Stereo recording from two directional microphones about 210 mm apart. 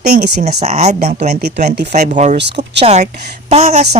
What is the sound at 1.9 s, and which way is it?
Speech, 35° right (ahead or behind).